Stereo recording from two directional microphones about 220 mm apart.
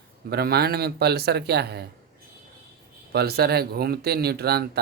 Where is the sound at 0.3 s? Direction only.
45° right (ahead or behind).